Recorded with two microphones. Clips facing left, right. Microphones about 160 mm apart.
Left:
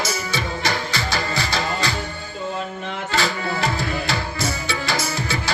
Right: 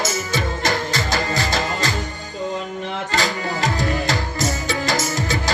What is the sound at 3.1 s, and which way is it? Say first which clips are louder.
Tabla: even; 40° right (ahead or behind).